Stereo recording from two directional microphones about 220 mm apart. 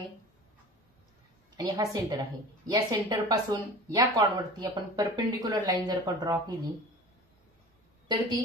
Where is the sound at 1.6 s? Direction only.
15° right (ahead or behind).